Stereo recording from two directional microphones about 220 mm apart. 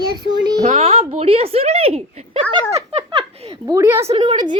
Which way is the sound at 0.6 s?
30° right (ahead or behind).